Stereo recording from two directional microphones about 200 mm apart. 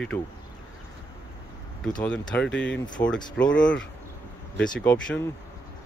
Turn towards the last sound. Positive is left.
turn(degrees=10)  # may be behind; listen again after turning